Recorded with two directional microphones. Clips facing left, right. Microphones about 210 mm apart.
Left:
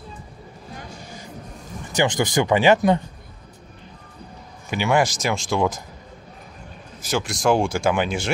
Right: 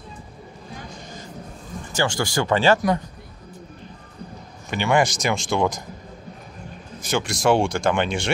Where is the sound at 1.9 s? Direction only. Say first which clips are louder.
Left 3 dB; 20° left (ahead or behind).